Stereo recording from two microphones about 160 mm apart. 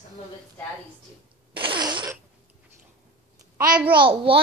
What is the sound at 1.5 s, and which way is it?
Fart, 30° right (ahead or behind).